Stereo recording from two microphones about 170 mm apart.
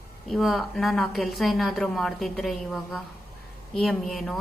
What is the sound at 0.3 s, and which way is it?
A woman's voice, centre (ahead or behind).